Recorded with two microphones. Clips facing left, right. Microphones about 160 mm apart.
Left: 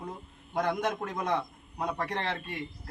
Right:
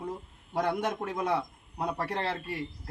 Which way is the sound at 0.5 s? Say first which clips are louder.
Even; 5° right (ahead or behind).